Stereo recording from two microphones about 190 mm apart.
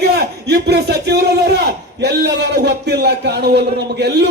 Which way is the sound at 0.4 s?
60° right (ahead or behind).